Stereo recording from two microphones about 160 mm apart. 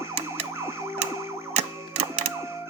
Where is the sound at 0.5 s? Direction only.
15° right (ahead or behind).